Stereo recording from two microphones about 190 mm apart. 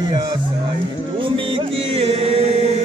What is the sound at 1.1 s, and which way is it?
Music, 25° right (ahead or behind).